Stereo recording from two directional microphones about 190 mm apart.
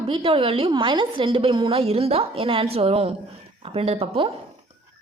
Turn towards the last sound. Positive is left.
turn(degrees=-30)  # may be behind; listen again after turning